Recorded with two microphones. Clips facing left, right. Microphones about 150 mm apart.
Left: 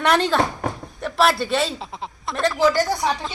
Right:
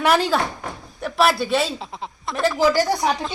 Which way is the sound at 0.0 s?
5° right (ahead or behind).